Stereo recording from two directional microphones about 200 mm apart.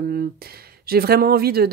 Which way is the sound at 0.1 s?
50° right (ahead or behind).